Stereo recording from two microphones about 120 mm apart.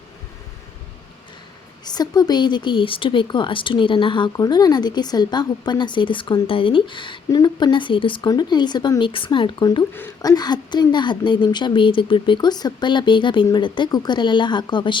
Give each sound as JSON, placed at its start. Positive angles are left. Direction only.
{"t": 1.8, "sound": "a woman's voice", "side_deg": 35}